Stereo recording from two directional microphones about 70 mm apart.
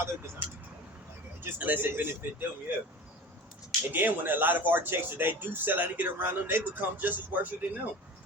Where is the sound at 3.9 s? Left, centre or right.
Right.